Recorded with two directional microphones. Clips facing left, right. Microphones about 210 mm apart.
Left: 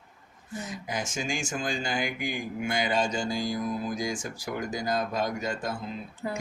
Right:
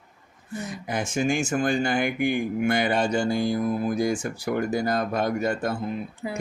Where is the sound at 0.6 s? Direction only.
60° right (ahead or behind).